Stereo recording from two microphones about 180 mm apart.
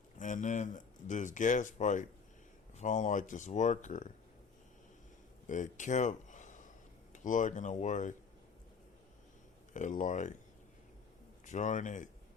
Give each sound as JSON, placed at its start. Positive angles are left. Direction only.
{"t": 0.2, "sound": "speech", "side_deg": 45}
{"t": 5.5, "sound": "speech", "side_deg": 45}
{"t": 9.7, "sound": "speech", "side_deg": 45}
{"t": 11.4, "sound": "speech", "side_deg": 45}